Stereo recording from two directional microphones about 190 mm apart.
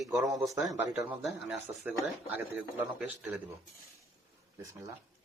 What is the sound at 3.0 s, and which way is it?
Speech, 10° right (ahead or behind).